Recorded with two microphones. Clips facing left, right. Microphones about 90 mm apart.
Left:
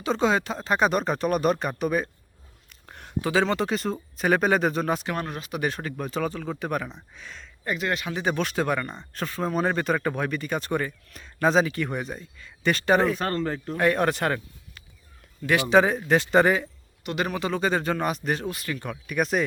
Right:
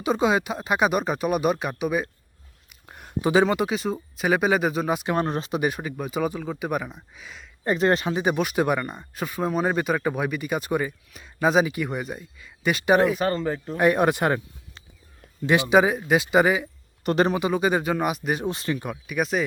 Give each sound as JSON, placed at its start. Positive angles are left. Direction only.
{"t": 0.0, "sound": "speech", "side_deg": -15}
{"t": 2.6, "sound": "a sound", "side_deg": -5}
{"t": 3.2, "sound": "speech", "side_deg": -20}
{"t": 5.0, "sound": "speech", "side_deg": -25}
{"t": 7.6, "sound": "speech", "side_deg": -35}
{"t": 8.1, "sound": "speech", "side_deg": -15}
{"t": 13.7, "sound": "speech", "side_deg": -15}
{"t": 17.0, "sound": "a man's voice", "side_deg": -40}
{"t": 17.2, "sound": "speech", "side_deg": -15}
{"t": 18.4, "sound": "speech", "side_deg": -25}
{"t": 18.8, "sound": "speech", "side_deg": -5}